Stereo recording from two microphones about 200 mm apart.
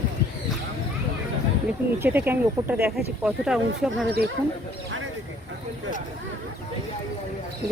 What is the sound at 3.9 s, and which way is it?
Speech, 55° right (ahead or behind).